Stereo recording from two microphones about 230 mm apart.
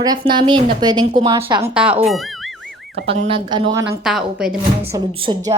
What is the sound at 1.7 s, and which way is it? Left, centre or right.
Speech, centre.